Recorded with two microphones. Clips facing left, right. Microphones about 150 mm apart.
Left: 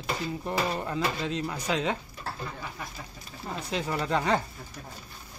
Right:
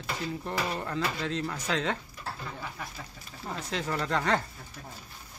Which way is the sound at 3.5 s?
15° left (ahead or behind).